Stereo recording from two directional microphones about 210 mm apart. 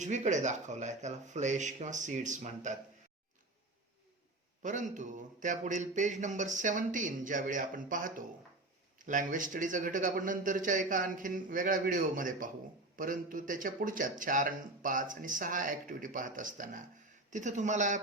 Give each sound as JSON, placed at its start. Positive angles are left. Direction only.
{"t": 0.0, "sound": "speech", "side_deg": -35}
{"t": 4.6, "sound": "speech", "side_deg": -35}